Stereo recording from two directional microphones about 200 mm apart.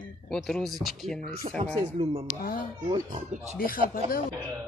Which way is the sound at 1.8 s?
25° right (ahead or behind).